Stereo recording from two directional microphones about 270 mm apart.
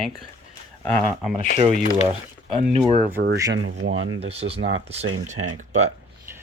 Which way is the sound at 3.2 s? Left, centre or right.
Right.